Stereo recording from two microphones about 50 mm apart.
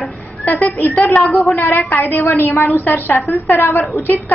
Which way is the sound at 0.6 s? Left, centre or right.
Left.